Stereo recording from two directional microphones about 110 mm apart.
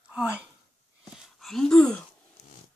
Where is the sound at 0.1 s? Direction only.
10° right (ahead or behind).